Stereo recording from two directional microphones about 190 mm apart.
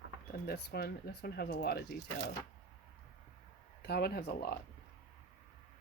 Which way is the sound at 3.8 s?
60° left (ahead or behind).